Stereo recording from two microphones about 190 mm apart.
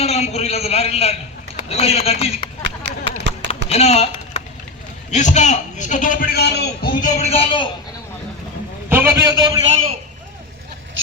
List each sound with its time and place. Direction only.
0.0 s a man's voice: 35° left (ahead or behind)
2.6 s a sound: 65° right (ahead or behind)
3.7 s typing: 35° left (ahead or behind)
5.1 s a man's voice: 40° left (ahead or behind)
8.9 s a man's voice: 10° right (ahead or behind)